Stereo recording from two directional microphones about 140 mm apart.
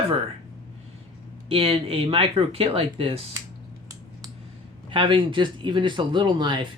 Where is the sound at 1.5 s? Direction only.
40° right (ahead or behind).